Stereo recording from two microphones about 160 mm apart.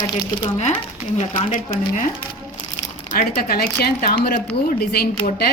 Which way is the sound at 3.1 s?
70° left (ahead or behind).